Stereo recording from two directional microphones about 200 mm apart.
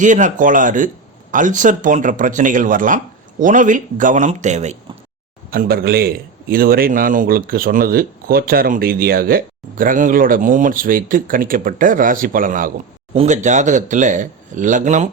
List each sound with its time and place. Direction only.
0.0 s speech: 40° right (ahead or behind)
5.5 s a man's voice: 50° right (ahead or behind)